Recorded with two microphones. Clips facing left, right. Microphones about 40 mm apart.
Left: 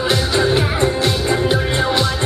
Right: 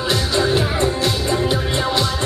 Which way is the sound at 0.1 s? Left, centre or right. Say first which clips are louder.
Left 1 dB; centre.